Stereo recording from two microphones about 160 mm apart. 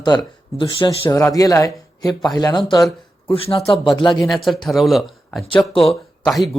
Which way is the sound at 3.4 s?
35° left (ahead or behind).